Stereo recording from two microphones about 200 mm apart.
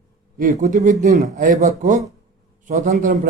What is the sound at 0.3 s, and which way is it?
A man's voice, 40° right (ahead or behind).